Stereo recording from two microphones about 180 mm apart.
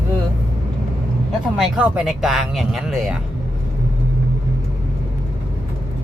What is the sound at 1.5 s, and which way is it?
Speech, 5° right (ahead or behind).